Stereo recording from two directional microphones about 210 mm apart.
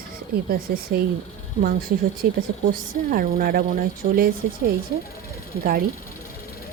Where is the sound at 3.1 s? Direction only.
45° right (ahead or behind).